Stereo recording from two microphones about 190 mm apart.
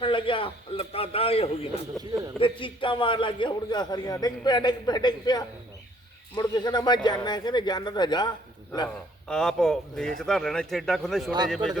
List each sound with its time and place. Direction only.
0.0 s a man's voice: 25° left (ahead or behind)
2.0 s speech: centre (ahead or behind)
2.4 s a man's voice: 25° left (ahead or behind)
9.2 s speech: 5° left (ahead or behind)